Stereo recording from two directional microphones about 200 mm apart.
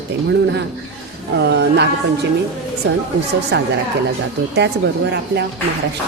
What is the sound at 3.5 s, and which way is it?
Speech, 55° right (ahead or behind).